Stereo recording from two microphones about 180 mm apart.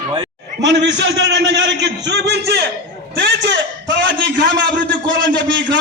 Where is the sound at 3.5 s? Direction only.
90° right.